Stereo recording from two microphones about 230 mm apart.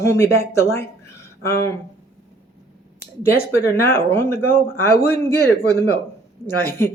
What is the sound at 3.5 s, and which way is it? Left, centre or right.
Speech, centre.